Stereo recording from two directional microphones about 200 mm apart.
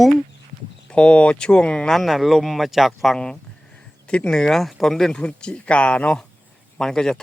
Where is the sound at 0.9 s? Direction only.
5° left (ahead or behind).